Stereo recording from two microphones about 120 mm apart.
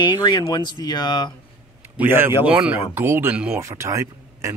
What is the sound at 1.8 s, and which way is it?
A man's voice, 20° right (ahead or behind).